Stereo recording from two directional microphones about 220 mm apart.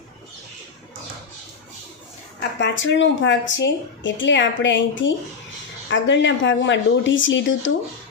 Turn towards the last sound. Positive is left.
turn(degrees=60)  # may be behind; listen again after turning